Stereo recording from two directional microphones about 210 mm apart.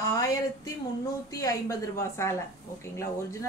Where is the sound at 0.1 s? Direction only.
15° left (ahead or behind).